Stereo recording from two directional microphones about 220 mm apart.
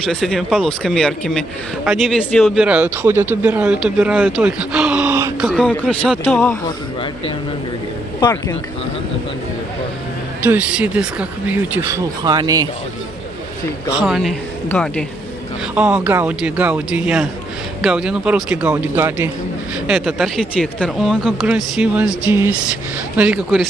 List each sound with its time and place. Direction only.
0.0 s speech: centre (ahead or behind)
4.4 s a sound: 5° right (ahead or behind)
5.5 s speech: 5° left (ahead or behind)
8.2 s speech: 15° left (ahead or behind)
10.4 s speech: 5° right (ahead or behind)
13.9 s speech: centre (ahead or behind)